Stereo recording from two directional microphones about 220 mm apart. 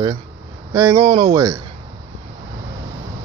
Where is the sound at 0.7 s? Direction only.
15° right (ahead or behind).